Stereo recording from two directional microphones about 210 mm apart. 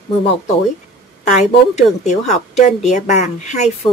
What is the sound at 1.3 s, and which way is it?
A woman's voice, 35° left (ahead or behind).